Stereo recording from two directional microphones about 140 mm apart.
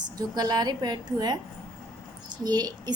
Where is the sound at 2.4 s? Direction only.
30° right (ahead or behind).